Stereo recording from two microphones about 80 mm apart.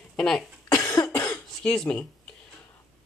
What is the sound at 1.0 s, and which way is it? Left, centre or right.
Cough, left.